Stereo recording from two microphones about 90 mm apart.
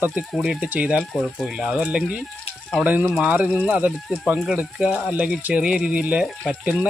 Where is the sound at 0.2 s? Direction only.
5° right (ahead or behind).